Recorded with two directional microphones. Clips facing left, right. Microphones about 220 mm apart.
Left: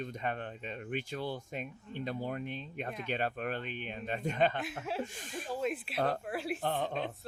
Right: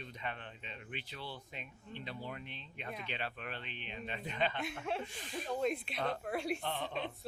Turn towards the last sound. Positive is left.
turn(degrees=45)  # may be behind; listen again after turning